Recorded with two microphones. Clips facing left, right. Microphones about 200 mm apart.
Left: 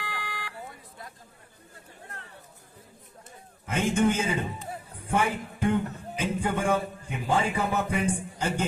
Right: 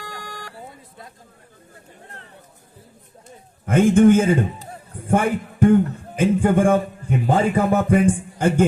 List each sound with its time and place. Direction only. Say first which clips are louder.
0.0 s vehicle: right 2 dB; 45° right (ahead or behind)
0.6 s a sound: right 3 dB; 25° right (ahead or behind)
3.7 s a man's voice: right 11 dB; 55° right (ahead or behind)